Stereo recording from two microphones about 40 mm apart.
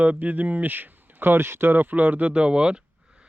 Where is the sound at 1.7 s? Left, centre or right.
Right.